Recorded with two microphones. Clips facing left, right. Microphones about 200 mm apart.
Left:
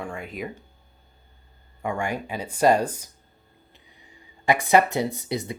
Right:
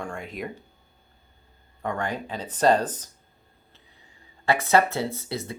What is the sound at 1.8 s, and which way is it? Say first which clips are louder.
Speech: left 1 dB; 10° left (ahead or behind).